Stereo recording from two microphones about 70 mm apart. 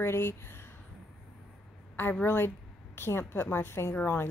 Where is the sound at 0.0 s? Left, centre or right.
Left.